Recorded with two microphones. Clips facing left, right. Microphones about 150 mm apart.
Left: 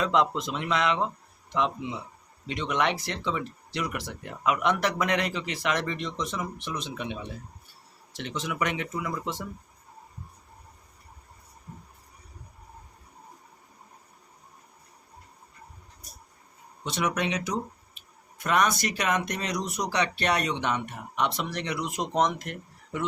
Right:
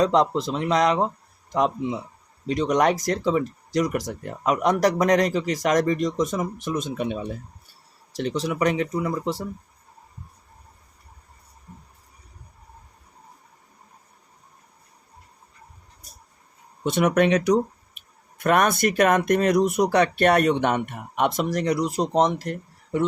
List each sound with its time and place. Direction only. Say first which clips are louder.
0.0 s speech: right 5 dB; 35° right (ahead or behind)
16.8 s speech: right 9 dB; 55° right (ahead or behind); by 23.0 s 35° right (ahead or behind)